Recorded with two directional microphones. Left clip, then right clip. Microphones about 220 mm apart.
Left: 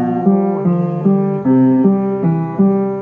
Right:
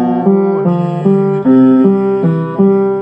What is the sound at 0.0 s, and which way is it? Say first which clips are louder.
Music: right 4 dB; 5° right (ahead or behind).